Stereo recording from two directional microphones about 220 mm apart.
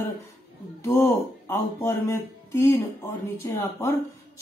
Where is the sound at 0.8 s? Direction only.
10° left (ahead or behind).